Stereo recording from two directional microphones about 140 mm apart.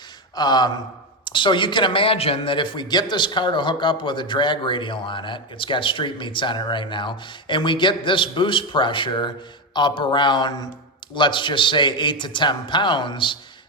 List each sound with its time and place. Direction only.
0.3 s a man's voice: 30° left (ahead or behind)